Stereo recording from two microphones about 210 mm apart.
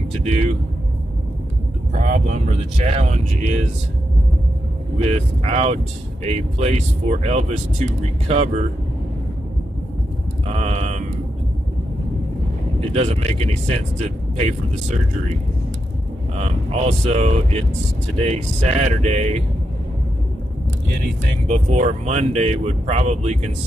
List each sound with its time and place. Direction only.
0.2 s speech: 30° right (ahead or behind)
2.0 s speech: 35° right (ahead or behind)
5.0 s speech: 30° right (ahead or behind)
10.5 s mantra: 30° right (ahead or behind)
12.9 s speech: 30° right (ahead or behind)
16.3 s speech: 30° right (ahead or behind)
21.5 s speech: 35° right (ahead or behind)